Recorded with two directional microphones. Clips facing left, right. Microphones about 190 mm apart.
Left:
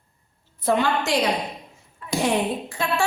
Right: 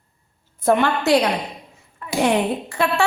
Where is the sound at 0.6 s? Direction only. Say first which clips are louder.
Right 4 dB; 60° right (ahead or behind).